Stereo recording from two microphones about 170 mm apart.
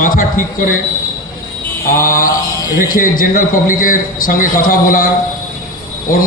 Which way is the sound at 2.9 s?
55° left (ahead or behind).